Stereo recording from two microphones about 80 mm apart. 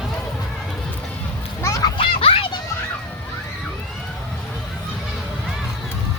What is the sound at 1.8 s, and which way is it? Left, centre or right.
Children playing, left.